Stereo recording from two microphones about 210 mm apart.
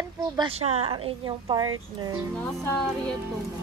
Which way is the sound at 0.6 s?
30° right (ahead or behind).